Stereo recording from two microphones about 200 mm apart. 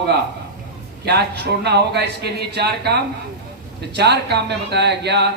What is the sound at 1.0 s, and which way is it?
Speech, 55° right (ahead or behind).